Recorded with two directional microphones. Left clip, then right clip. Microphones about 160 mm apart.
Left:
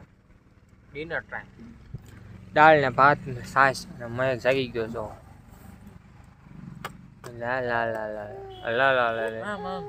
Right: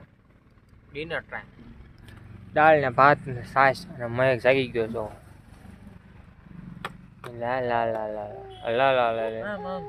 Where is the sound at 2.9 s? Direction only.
Centre (ahead or behind).